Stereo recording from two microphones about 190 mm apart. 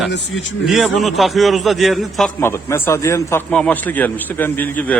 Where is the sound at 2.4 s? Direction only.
10° left (ahead or behind).